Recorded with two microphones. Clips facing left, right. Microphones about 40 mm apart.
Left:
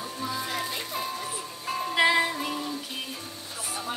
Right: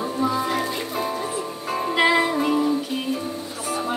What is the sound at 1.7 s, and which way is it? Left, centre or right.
Music, centre.